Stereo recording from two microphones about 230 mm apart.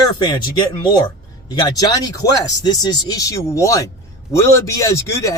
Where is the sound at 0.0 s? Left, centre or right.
Centre.